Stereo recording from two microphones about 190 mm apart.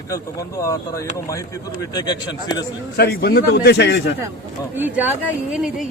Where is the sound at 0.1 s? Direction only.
15° left (ahead or behind).